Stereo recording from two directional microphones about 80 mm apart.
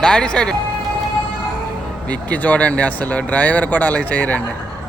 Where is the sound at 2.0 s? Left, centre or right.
Centre.